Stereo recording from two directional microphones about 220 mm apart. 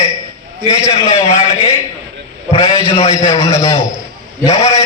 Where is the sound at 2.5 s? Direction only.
25° left (ahead or behind).